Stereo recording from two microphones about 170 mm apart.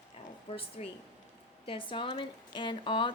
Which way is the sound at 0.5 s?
35° left (ahead or behind).